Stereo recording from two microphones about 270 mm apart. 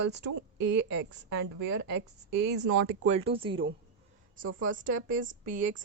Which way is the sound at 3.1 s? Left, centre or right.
Right.